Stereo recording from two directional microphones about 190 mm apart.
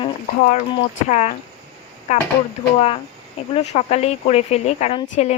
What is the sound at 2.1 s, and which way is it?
Speech, 35° left (ahead or behind).